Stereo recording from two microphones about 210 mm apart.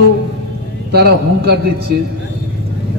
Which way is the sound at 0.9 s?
50° right (ahead or behind).